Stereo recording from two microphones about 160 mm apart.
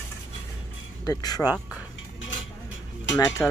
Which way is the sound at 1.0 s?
25° left (ahead or behind).